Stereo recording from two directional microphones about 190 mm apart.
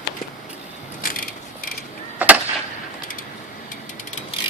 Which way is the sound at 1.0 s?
45° left (ahead or behind).